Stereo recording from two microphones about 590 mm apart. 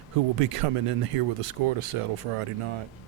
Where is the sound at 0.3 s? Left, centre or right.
Right.